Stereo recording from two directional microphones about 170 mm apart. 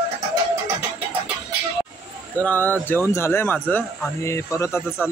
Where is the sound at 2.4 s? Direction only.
10° left (ahead or behind).